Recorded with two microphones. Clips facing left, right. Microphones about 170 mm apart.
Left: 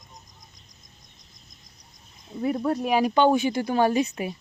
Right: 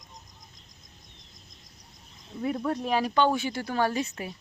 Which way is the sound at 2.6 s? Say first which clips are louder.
Left 5 dB; 10° left (ahead or behind).